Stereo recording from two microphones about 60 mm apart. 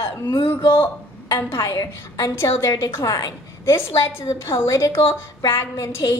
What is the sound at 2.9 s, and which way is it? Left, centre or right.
Speech, left.